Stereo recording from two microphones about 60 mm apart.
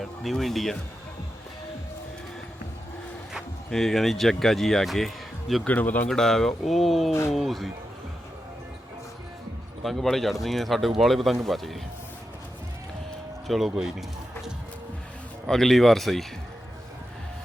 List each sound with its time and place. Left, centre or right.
0.0 s speech: centre
3.7 s speech: centre
5.6 s a man's voice: left
6.1 s speech: centre
9.8 s speech: centre
13.5 s speech: centre
15.4 s speech: centre